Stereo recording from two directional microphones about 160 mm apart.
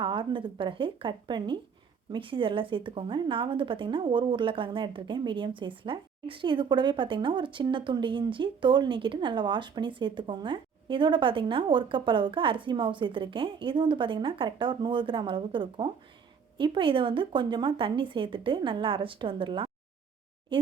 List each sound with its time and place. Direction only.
0.0 s speech: 30° right (ahead or behind)